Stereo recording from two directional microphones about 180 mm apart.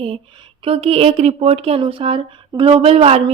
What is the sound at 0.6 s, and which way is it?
Speech, 35° right (ahead or behind).